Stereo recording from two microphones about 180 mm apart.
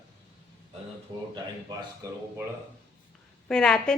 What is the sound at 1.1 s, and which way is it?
Speech, 25° right (ahead or behind).